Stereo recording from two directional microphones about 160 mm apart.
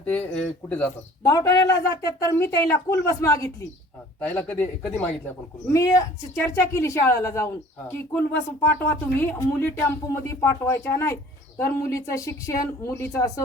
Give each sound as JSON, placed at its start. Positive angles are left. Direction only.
{"t": 0.0, "sound": "speech", "side_deg": 10}
{"t": 1.2, "sound": "speech", "side_deg": 25}
{"t": 4.2, "sound": "speech", "side_deg": 10}
{"t": 5.7, "sound": "speech", "side_deg": 20}